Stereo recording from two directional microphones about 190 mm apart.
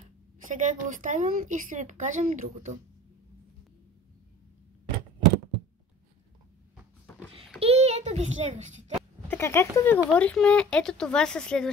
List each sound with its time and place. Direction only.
0.5 s a woman's voice: 40° right (ahead or behind)
7.6 s a sound: 35° right (ahead or behind)
9.3 s speech: 15° left (ahead or behind)